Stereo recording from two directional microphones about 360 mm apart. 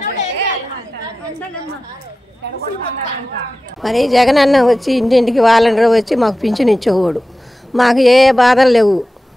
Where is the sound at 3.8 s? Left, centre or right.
Centre.